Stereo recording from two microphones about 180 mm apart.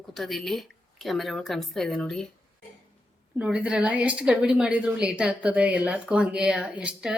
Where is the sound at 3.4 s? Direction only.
5° right (ahead or behind).